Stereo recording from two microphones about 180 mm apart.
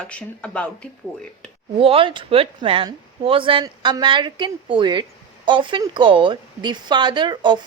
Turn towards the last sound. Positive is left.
turn(degrees=-25)  # may be behind; listen again after turning